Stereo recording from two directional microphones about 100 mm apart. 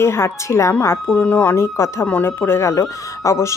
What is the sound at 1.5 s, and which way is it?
Speech, 30° left (ahead or behind).